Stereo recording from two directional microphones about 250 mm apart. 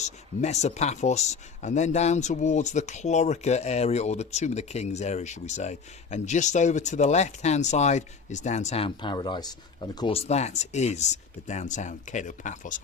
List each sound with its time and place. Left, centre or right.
0.0 s speech: left